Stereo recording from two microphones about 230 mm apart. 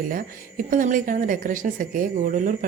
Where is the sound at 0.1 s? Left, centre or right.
Right.